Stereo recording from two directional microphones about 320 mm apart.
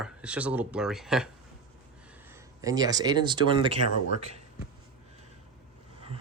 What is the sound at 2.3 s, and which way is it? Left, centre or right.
Speech, centre.